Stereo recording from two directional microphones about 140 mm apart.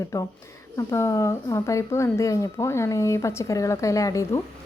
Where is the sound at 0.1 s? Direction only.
20° left (ahead or behind).